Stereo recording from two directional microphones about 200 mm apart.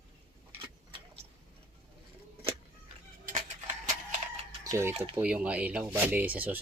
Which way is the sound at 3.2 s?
40° right (ahead or behind).